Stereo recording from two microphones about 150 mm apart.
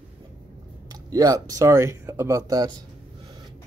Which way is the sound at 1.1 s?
25° right (ahead or behind).